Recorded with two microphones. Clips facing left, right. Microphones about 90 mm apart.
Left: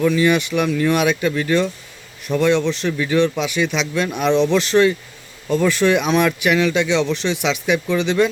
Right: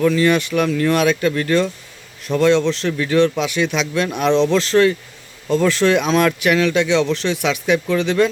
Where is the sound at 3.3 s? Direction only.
Centre (ahead or behind).